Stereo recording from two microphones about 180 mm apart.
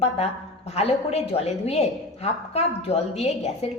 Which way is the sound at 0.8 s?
35° left (ahead or behind).